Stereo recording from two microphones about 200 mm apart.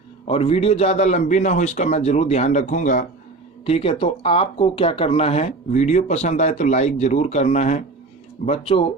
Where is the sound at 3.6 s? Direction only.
30° left (ahead or behind).